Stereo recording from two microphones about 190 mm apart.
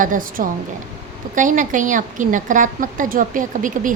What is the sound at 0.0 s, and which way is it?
A woman's voice, 45° right (ahead or behind).